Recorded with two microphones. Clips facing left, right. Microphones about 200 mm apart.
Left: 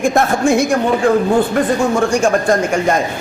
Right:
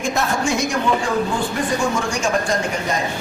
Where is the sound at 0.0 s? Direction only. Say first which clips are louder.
Left 7 dB; 55° left (ahead or behind).